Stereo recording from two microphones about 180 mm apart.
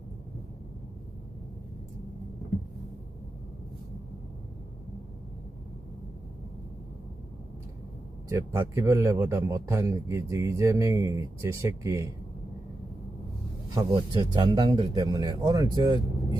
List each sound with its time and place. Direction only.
8.3 s a man's voice: 15° right (ahead or behind)
13.7 s speech: 20° right (ahead or behind)